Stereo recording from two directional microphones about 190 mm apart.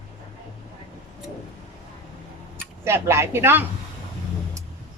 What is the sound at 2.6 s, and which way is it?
Speech, 15° right (ahead or behind).